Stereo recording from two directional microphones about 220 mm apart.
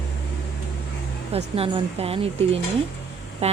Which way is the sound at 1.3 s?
25° right (ahead or behind).